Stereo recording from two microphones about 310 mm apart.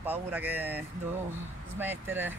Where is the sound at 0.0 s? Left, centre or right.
Centre.